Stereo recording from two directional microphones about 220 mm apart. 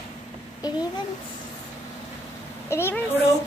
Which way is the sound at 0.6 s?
15° left (ahead or behind).